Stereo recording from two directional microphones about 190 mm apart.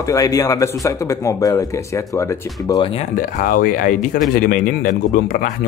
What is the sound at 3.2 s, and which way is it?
A man's voice, 45° left (ahead or behind).